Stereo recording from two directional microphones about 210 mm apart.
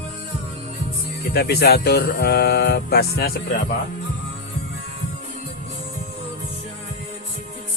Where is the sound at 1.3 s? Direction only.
50° left (ahead or behind).